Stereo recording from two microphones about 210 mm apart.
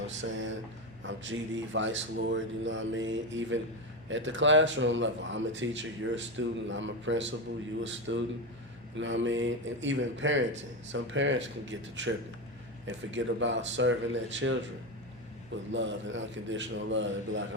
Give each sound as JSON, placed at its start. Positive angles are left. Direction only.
{"t": 0.1, "sound": "speech", "side_deg": -60}
{"t": 15.7, "sound": "speech", "side_deg": -60}